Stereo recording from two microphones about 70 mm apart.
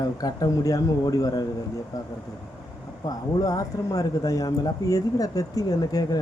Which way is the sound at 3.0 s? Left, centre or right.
Left.